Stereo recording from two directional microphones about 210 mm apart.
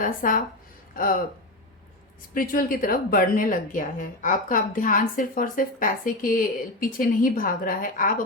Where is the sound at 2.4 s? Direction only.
40° left (ahead or behind).